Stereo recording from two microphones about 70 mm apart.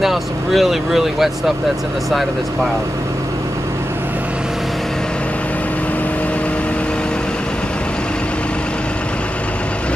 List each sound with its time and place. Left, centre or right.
0.0 s speech: centre